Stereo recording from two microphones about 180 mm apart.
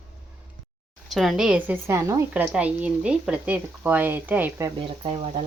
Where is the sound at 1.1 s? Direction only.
Centre (ahead or behind).